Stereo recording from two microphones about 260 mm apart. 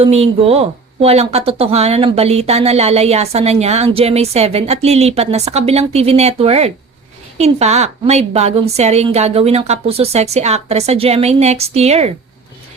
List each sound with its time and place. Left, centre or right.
0.0 s speech: right